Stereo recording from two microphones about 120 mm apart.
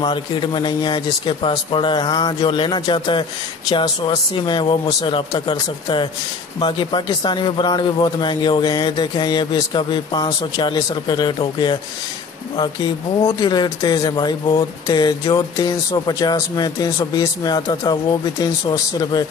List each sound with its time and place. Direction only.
0.0 s a man's voice: 40° left (ahead or behind)
13.4 s a man's voice: 35° left (ahead or behind)